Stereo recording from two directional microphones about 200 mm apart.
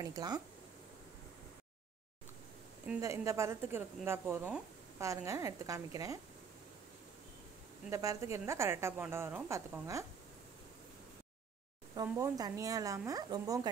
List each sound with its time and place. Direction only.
0.0 s speech: 20° right (ahead or behind)
2.9 s a woman's voice: 15° right (ahead or behind)
7.9 s a woman's voice: 15° right (ahead or behind)
12.0 s a woman's voice: 20° right (ahead or behind)